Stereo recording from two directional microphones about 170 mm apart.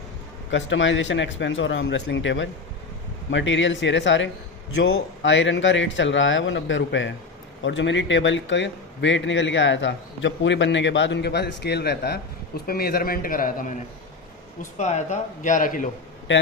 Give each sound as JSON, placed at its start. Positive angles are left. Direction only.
{"t": 0.5, "sound": "a man's voice", "side_deg": 90}
{"t": 4.8, "sound": "a man's voice", "side_deg": 80}
{"t": 14.6, "sound": "speech", "side_deg": 45}